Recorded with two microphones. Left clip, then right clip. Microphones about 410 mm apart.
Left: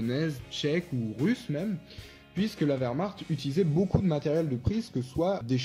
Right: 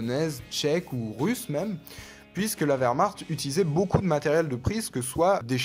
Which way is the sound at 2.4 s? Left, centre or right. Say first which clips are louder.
Right 4 dB; centre.